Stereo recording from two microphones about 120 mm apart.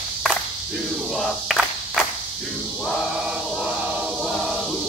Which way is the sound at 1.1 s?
Centre (ahead or behind).